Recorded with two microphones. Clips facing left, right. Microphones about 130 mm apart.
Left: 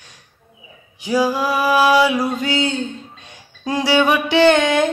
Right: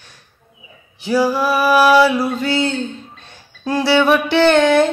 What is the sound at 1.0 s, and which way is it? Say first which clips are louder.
Male singing: right 2 dB; 15° left (ahead or behind).